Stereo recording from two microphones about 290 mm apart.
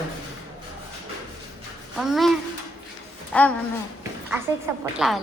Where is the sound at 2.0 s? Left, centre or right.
Centre.